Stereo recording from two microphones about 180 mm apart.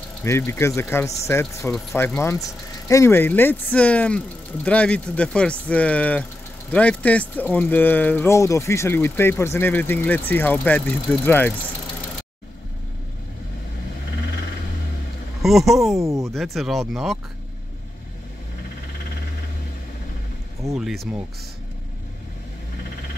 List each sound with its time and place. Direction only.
0.2 s speech: 15° left (ahead or behind)
15.4 s speech: centre (ahead or behind)
16.0 s speech: 15° right (ahead or behind)
16.3 s speech: centre (ahead or behind)
20.7 s speech: centre (ahead or behind)